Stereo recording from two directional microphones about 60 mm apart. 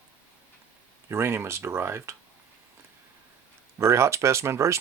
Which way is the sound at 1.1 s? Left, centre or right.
Right.